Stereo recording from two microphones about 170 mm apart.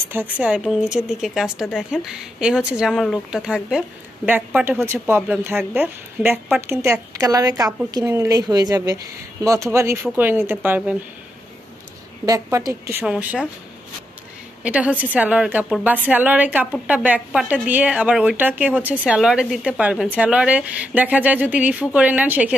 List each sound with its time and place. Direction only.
0.0 s a woman's voice: 10° right (ahead or behind)
12.3 s a woman's voice: 20° right (ahead or behind)
14.6 s a woman's voice: 10° right (ahead or behind)